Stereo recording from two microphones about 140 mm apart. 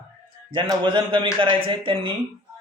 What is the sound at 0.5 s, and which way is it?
A man's voice, 35° right (ahead or behind).